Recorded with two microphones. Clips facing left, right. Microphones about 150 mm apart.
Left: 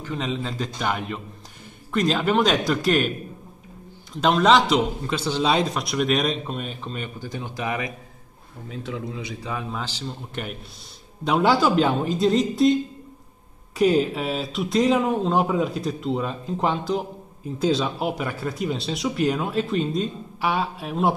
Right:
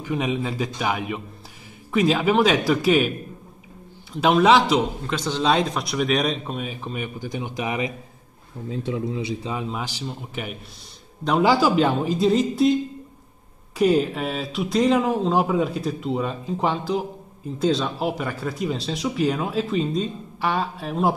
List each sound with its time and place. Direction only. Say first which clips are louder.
0.0 s a man's voice: right 3 dB; 10° right (ahead or behind)
4.2 s a man's voice: right 1 dB; 5° right (ahead or behind)
13.7 s a man's voice: even; centre (ahead or behind)